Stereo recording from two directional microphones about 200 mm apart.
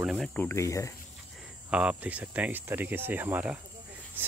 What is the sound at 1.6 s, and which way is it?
Speech, 5° right (ahead or behind).